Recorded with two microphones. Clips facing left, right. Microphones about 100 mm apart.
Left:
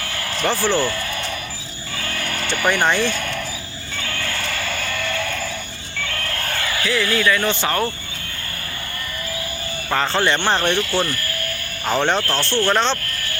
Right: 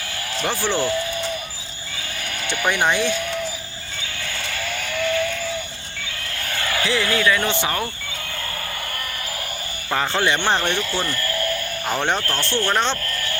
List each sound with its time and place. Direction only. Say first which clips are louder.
0.4 s speech: left 4 dB; 15° right (ahead or behind)
0.8 s speech: even; 60° left (ahead or behind)
2.0 s a sound: left 5 dB; 60° left (ahead or behind)
2.6 s speech: left 2 dB; 5° right (ahead or behind)
3.1 s basketball bounce: right 1 dB; 60° left (ahead or behind)
4.0 s music: left 5 dB; 65° left (ahead or behind)
6.1 s vehicle: left 6 dB; 60° left (ahead or behind)
6.8 s speech: left 1 dB; 20° right (ahead or behind)
10.2 s speech: left 1 dB; 10° right (ahead or behind)